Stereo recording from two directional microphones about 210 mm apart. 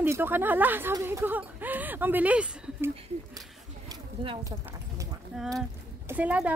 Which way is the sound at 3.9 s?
20° right (ahead or behind).